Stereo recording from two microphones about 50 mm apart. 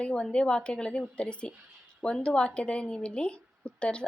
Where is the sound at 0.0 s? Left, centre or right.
Left.